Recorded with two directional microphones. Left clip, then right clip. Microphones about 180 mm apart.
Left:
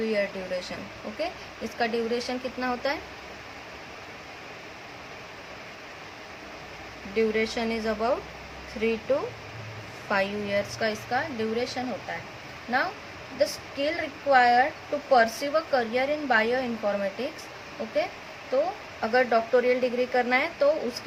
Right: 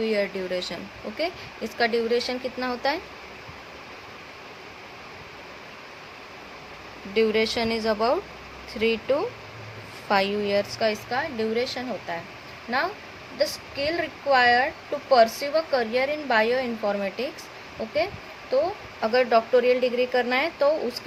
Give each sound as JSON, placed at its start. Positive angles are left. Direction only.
{"t": 0.0, "sound": "a woman's voice", "side_deg": -40}
{"t": 7.2, "sound": "a woman's voice", "side_deg": -35}
{"t": 19.0, "sound": "a woman's voice", "side_deg": -30}